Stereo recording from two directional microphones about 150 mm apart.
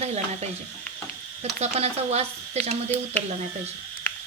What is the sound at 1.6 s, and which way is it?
Speech, 45° right (ahead or behind).